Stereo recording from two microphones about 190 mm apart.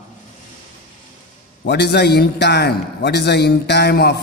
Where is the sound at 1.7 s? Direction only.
60° left (ahead or behind).